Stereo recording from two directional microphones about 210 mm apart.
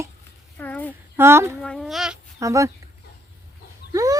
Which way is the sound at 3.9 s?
15° right (ahead or behind).